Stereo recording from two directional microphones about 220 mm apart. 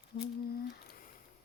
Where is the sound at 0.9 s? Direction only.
40° left (ahead or behind).